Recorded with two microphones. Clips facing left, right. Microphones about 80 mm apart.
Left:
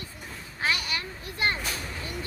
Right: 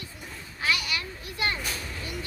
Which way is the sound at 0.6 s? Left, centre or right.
Left.